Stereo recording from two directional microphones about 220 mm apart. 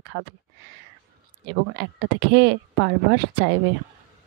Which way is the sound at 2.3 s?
50° right (ahead or behind).